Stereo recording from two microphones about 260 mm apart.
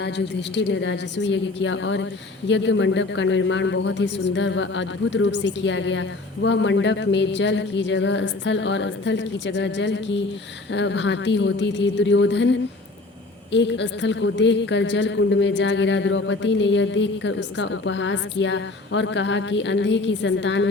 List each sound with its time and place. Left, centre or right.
0.5 s a man's voice: left